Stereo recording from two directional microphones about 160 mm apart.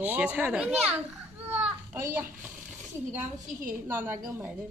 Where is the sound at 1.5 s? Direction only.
15° right (ahead or behind).